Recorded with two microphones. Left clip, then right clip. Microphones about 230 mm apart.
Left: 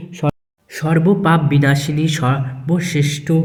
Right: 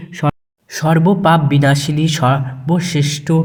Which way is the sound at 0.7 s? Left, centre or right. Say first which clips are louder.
Right 2 dB; centre.